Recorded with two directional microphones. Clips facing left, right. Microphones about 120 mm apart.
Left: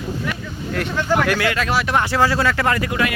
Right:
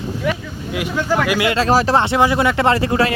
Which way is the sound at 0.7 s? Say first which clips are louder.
Right 1 dB; 5° right (ahead or behind).